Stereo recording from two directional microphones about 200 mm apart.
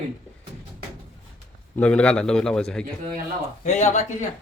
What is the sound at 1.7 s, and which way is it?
A man's voice, 5° left (ahead or behind).